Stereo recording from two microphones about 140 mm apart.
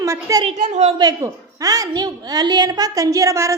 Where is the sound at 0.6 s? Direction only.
55° right (ahead or behind).